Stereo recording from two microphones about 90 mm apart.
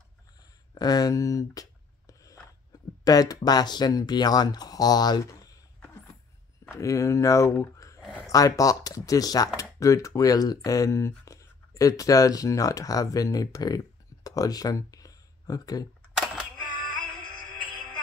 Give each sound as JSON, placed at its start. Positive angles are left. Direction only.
{"t": 0.7, "sound": "a sound", "side_deg": 45}
{"t": 3.0, "sound": "speech", "side_deg": 45}
{"t": 6.6, "sound": "speech", "side_deg": 30}